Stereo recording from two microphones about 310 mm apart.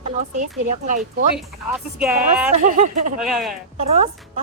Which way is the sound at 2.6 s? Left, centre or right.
Right.